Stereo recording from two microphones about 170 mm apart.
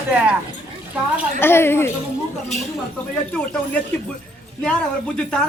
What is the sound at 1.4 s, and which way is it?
Speech, 15° left (ahead or behind).